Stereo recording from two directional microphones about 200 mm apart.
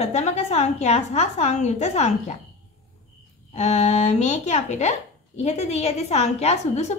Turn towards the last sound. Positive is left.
turn(degrees=35)  # may be behind; listen again after turning